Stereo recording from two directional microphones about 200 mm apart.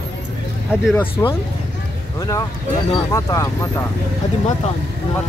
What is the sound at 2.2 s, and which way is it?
Speech, 15° left (ahead or behind).